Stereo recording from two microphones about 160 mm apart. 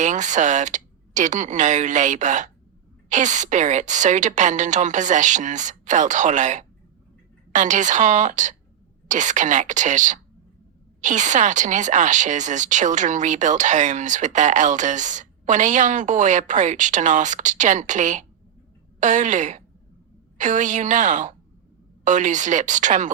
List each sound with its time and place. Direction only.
0.0 s speech: 50° right (ahead or behind)